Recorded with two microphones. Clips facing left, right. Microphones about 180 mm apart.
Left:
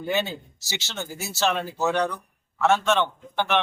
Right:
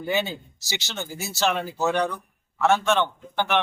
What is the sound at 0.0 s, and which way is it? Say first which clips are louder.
Speech: even; 15° right (ahead or behind).